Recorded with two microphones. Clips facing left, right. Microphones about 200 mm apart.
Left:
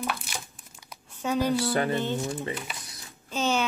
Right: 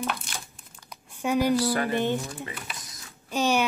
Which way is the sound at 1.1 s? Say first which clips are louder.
Right 2 dB; 10° right (ahead or behind).